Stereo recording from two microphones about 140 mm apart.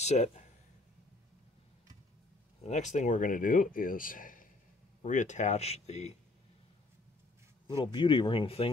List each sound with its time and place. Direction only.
0.0 s speech: 55° left (ahead or behind)
2.6 s speech: 55° left (ahead or behind); by 4.5 s 75° left (ahead or behind)
5.0 s speech: 60° left (ahead or behind)
7.6 s speech: 35° left (ahead or behind)